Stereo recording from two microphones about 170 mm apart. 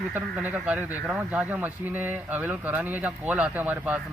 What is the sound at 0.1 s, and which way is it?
Speech, 5° right (ahead or behind).